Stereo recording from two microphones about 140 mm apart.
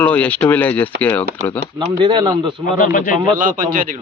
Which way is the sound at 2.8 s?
70° left (ahead or behind).